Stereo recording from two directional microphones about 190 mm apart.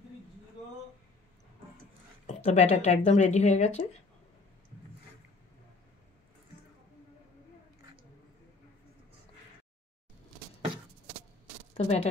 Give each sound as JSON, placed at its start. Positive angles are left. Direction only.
{"t": 2.2, "sound": "speech", "side_deg": 35}
{"t": 11.7, "sound": "speech", "side_deg": 35}